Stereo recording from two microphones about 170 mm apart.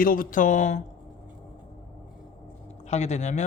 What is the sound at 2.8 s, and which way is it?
Speech, 40° left (ahead or behind).